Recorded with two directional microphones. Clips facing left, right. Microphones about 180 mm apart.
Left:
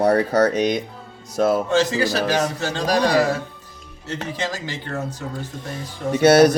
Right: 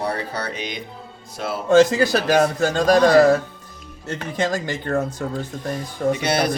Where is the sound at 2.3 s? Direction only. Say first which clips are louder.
Right 5 dB; 45° right (ahead or behind).